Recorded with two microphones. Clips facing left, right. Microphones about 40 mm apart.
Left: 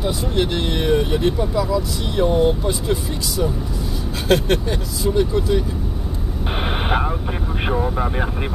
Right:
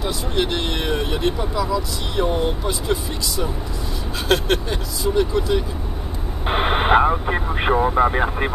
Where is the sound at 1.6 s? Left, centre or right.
Centre.